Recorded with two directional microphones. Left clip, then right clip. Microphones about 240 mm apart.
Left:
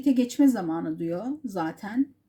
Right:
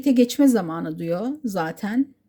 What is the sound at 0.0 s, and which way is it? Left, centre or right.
Speech, right.